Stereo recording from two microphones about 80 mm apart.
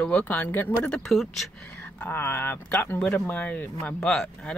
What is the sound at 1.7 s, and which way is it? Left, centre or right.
Speech, left.